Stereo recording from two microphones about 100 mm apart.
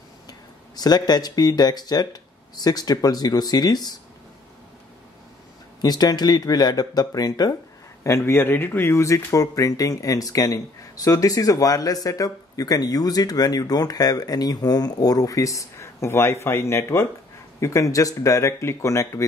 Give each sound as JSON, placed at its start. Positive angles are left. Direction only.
{"t": 0.3, "sound": "speech", "side_deg": 40}
{"t": 5.8, "sound": "speech", "side_deg": 40}
{"t": 8.0, "sound": "speech", "side_deg": 25}